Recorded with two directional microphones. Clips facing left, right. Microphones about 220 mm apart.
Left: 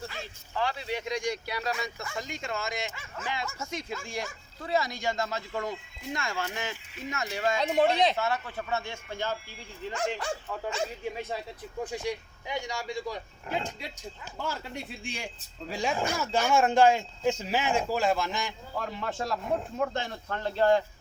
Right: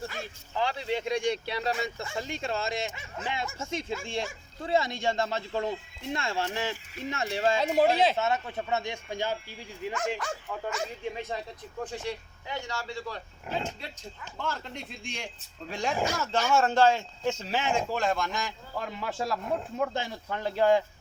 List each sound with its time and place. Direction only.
0.5 s speech: 20° right (ahead or behind)
7.6 s speech: 5° right (ahead or behind)
8.1 s speech: 25° right (ahead or behind)
11.0 s speech: 5° left (ahead or behind)
20.3 s speech: 10° right (ahead or behind)